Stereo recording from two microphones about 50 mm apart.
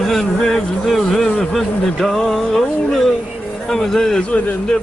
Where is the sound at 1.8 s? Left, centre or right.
Centre.